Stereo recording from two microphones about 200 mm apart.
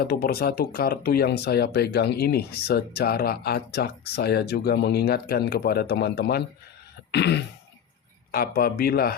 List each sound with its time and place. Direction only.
0.0 s speech: 50° left (ahead or behind)
7.1 s throat clearing: 55° left (ahead or behind)
8.3 s speech: 50° left (ahead or behind)